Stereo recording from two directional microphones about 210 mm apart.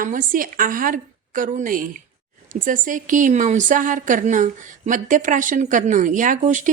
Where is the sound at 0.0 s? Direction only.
40° right (ahead or behind).